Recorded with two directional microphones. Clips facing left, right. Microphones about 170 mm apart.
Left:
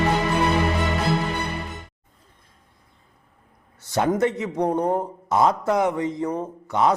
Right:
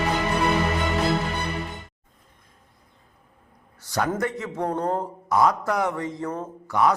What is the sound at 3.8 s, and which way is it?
A man's voice, 25° left (ahead or behind).